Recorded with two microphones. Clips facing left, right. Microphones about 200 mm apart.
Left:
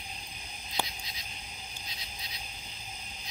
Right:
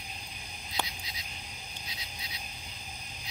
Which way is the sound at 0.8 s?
10° left (ahead or behind).